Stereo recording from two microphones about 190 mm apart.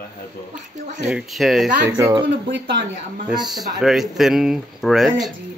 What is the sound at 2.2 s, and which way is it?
Speech, 60° right (ahead or behind).